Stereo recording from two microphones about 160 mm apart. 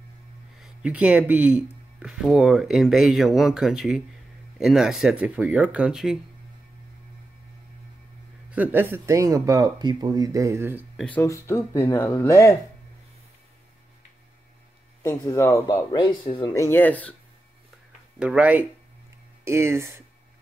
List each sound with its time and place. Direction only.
0.6 s speech: 5° right (ahead or behind)
8.5 s speech: 10° right (ahead or behind)
11.0 s speech: 10° left (ahead or behind)
15.0 s speech: 20° left (ahead or behind)
16.5 s speech: 15° left (ahead or behind)
18.2 s speech: 5° right (ahead or behind)